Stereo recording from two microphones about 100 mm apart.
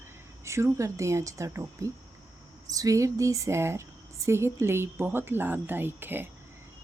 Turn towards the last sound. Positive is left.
turn(degrees=-20)  # may be behind; listen again after turning